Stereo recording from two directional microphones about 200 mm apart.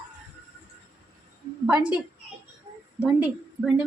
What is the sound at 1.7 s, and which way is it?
Speech, 5° right (ahead or behind).